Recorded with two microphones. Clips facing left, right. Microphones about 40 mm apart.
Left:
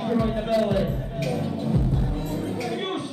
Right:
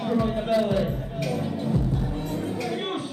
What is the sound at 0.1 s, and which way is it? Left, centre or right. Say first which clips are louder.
Music: even; centre.